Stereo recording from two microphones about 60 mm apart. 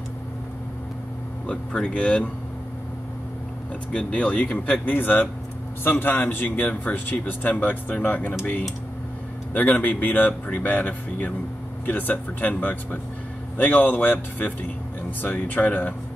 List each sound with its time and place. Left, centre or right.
1.5 s speech: centre
3.9 s speech: left
4.8 s speech: left